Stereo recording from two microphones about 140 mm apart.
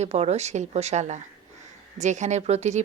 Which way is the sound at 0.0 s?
50° right (ahead or behind).